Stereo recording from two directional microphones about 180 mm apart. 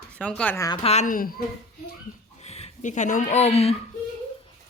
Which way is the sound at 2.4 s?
35° left (ahead or behind).